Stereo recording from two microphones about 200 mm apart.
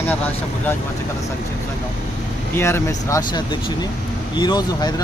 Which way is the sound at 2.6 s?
15° left (ahead or behind).